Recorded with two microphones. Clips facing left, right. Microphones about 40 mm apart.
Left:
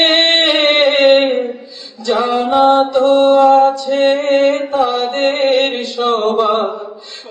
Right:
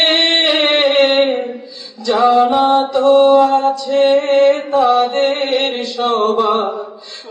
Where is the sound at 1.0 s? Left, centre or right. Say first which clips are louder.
Left 3 dB; left.